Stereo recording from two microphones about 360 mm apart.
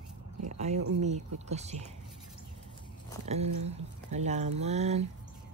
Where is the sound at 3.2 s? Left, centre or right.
Centre.